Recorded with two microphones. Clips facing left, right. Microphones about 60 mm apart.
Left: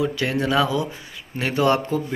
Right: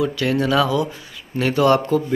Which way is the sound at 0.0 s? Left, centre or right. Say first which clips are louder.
Right 3 dB; centre.